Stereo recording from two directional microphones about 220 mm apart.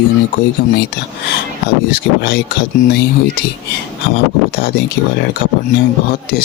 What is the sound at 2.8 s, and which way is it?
Speech, 35° left (ahead or behind).